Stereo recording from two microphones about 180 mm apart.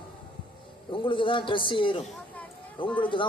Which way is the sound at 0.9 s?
25° left (ahead or behind).